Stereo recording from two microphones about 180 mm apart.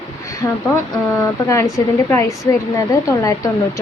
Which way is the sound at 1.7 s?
15° left (ahead or behind).